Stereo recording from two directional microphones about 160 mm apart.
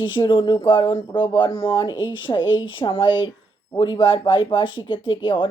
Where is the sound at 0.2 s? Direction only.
30° left (ahead or behind).